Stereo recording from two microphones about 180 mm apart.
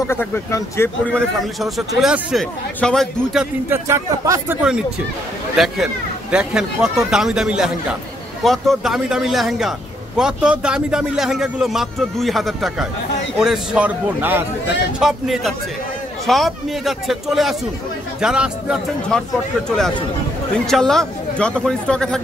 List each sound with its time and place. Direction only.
0.1 s a man's voice: 15° left (ahead or behind)
3.7 s speech: 15° right (ahead or behind)
5.6 s a man's voice: centre (ahead or behind)
20.5 s a man's voice: 5° left (ahead or behind)